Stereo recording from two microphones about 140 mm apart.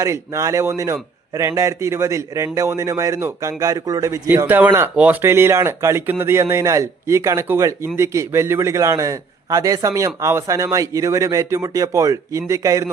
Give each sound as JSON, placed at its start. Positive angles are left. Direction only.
{"t": 0.0, "sound": "a man's voice", "side_deg": -20}